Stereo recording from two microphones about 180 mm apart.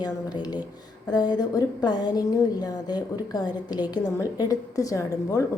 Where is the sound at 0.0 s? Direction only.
20° left (ahead or behind).